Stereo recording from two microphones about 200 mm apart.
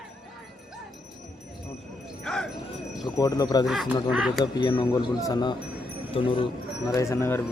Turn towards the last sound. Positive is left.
turn(degrees=15)  # may be behind; listen again after turning